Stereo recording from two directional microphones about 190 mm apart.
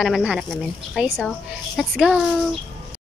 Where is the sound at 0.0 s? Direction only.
5° right (ahead or behind).